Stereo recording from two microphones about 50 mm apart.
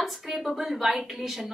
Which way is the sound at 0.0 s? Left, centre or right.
Centre.